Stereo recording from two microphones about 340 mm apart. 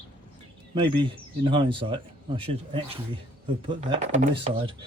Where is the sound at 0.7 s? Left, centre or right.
Centre.